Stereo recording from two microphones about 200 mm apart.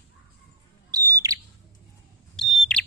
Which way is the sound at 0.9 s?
15° right (ahead or behind).